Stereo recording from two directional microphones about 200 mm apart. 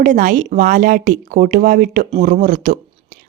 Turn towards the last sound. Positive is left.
turn(degrees=-40)  # may be behind; listen again after turning